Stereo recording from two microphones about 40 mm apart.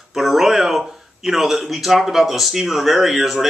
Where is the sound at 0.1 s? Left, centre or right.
Centre.